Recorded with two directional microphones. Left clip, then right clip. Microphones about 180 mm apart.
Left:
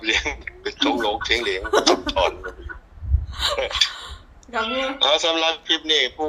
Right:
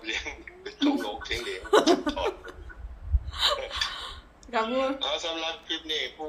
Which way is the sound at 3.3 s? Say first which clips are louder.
Left 3 dB; 5° left (ahead or behind).